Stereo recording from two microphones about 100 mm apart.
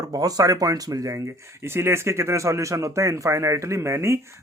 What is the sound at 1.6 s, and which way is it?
Speech, 25° right (ahead or behind).